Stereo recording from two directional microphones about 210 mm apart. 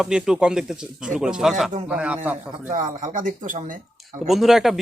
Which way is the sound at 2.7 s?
40° right (ahead or behind).